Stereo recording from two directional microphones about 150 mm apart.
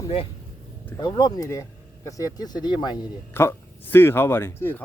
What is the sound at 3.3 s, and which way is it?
Speech, 15° left (ahead or behind).